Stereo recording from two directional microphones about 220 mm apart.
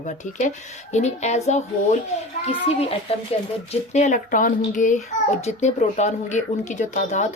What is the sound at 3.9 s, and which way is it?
A child's voice, 35° left (ahead or behind).